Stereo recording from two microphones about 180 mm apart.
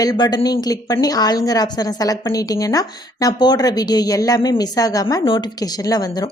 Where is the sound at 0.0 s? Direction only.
20° left (ahead or behind).